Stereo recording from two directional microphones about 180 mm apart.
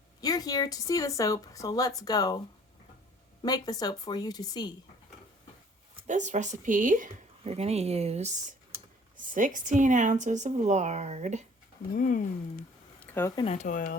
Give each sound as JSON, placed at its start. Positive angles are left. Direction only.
{"t": 0.2, "sound": "speech", "side_deg": 20}
{"t": 3.4, "sound": "speech", "side_deg": 20}
{"t": 6.1, "sound": "a woman's voice", "side_deg": -40}
{"t": 11.9, "sound": "speech", "side_deg": 50}
{"t": 13.0, "sound": "a sound", "side_deg": 10}
{"t": 13.3, "sound": "speech", "side_deg": 30}